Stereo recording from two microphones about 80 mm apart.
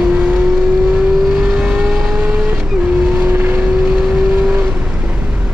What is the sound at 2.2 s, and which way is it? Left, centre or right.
Vehicle, right.